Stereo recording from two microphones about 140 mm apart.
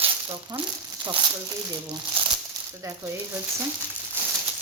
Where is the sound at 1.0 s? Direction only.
35° right (ahead or behind).